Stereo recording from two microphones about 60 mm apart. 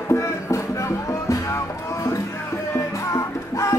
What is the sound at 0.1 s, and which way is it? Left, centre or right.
Music, left.